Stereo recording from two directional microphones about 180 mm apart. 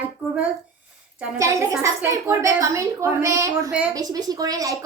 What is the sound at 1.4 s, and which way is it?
A woman's voice, 15° right (ahead or behind).